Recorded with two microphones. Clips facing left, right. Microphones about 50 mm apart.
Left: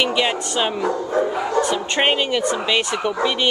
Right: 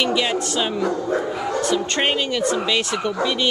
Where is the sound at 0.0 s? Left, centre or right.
Centre.